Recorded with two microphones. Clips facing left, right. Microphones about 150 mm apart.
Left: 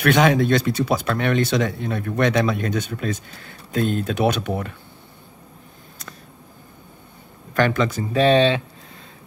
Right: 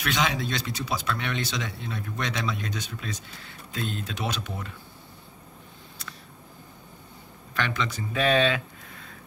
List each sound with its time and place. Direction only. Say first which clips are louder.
0.0 s speech: left 11 dB; 55° left (ahead or behind)
7.5 s speech: left 10 dB; 45° left (ahead or behind); by 8.6 s 30° left (ahead or behind)